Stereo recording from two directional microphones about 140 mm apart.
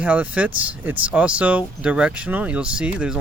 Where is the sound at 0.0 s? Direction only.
10° right (ahead or behind).